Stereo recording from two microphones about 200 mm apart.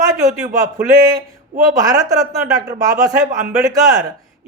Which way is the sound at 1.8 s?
20° right (ahead or behind).